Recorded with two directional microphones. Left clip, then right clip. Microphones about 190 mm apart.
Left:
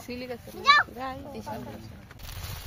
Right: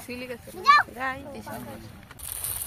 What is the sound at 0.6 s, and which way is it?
Speech, 45° left (ahead or behind).